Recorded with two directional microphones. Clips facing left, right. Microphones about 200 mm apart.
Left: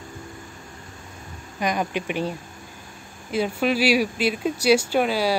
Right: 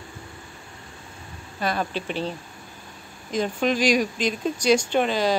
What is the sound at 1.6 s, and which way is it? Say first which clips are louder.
Speech: left 2 dB; 15° left (ahead or behind).